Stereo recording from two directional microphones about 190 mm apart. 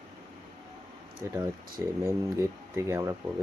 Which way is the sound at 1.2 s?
15° right (ahead or behind).